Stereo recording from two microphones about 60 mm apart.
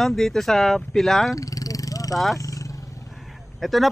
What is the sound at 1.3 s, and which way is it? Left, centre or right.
Vehicle, left.